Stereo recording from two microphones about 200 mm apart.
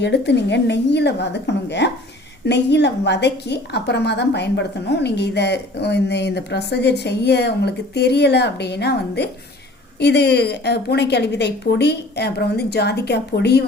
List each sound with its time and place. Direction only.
0.0 s a woman's voice: 60° left (ahead or behind)